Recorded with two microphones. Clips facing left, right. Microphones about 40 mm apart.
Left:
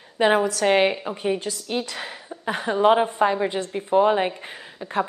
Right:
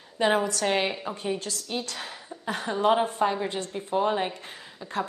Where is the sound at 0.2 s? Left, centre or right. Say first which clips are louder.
Left 5 dB; centre.